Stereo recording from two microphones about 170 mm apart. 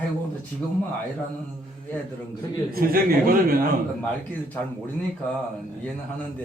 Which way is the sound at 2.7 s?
60° right (ahead or behind).